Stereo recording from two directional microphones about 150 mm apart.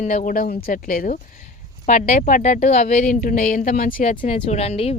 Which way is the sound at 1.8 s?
55° left (ahead or behind).